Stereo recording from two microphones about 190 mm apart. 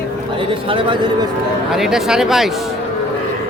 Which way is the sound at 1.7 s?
Centre (ahead or behind).